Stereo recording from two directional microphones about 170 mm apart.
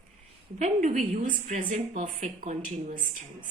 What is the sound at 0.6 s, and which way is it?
A woman's voice, 45° right (ahead or behind).